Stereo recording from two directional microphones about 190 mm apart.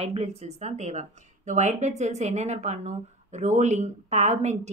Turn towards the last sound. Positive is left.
turn(degrees=-35)  # may be behind; listen again after turning